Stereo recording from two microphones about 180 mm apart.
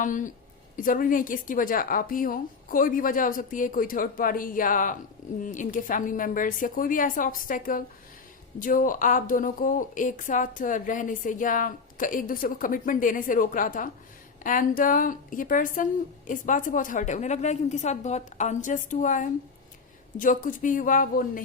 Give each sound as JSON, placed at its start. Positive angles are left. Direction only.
{"t": 0.0, "sound": "a woman's voice", "side_deg": 45}